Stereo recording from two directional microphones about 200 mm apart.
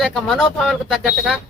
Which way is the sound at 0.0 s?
Centre (ahead or behind).